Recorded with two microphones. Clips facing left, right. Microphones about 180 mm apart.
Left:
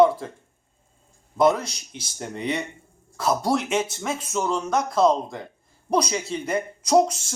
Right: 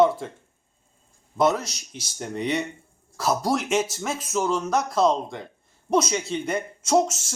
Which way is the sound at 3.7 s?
30° left (ahead or behind).